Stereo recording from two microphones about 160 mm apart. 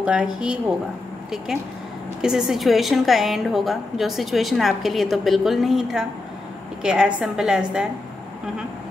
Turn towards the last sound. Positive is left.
turn(degrees=-5)  # may be behind; listen again after turning